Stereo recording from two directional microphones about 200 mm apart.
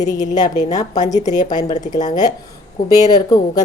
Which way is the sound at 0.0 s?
20° left (ahead or behind).